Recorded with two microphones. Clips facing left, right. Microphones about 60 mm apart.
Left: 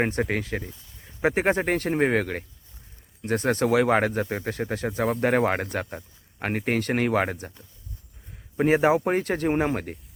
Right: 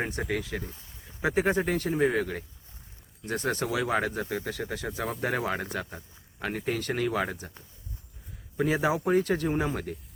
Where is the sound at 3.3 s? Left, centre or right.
Left.